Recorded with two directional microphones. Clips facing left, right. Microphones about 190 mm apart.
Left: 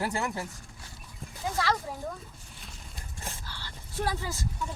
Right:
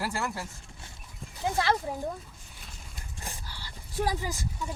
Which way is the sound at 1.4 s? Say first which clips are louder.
Right 2 dB; 25° right (ahead or behind).